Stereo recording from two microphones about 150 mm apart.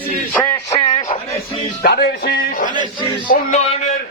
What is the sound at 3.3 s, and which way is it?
Music, 50° left (ahead or behind).